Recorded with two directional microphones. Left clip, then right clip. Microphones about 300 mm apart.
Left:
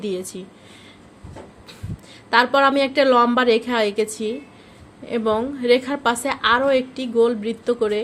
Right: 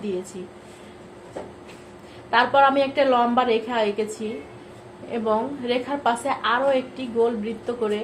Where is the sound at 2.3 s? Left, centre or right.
Left.